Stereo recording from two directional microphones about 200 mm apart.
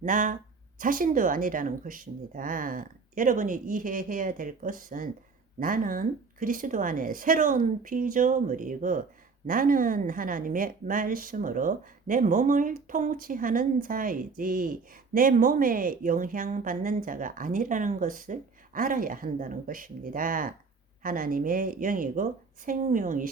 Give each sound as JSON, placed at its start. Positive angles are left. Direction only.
{"t": 0.0, "sound": "a woman's voice", "side_deg": -40}